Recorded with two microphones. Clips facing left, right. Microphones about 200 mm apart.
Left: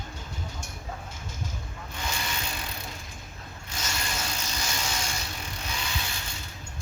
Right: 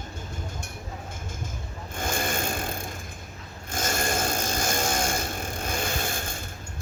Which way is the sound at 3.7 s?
50° right (ahead or behind).